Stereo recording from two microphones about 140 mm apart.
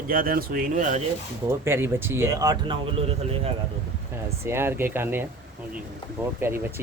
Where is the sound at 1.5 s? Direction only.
15° right (ahead or behind); by 3.5 s 45° right (ahead or behind).